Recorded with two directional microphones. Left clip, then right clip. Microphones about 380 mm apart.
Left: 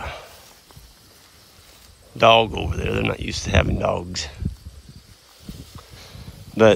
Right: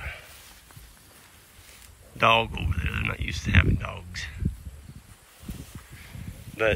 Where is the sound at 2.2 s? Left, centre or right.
Centre.